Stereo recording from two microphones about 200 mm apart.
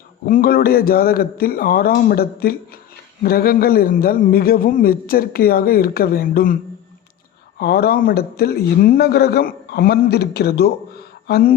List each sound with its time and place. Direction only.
0.3 s a man's voice: 45° left (ahead or behind)
7.6 s a man's voice: 50° left (ahead or behind)